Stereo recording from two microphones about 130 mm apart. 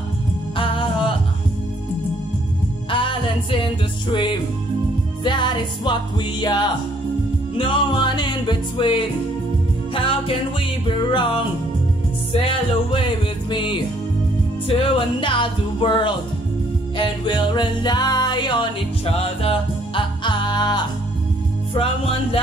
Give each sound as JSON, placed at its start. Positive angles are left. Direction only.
{"t": 0.6, "sound": "music", "side_deg": 40}
{"t": 2.9, "sound": "music", "side_deg": 40}
{"t": 13.5, "sound": "music", "side_deg": 40}
{"t": 21.7, "sound": "music", "side_deg": 45}